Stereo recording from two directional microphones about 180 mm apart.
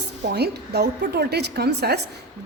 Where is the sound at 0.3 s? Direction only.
65° right (ahead or behind).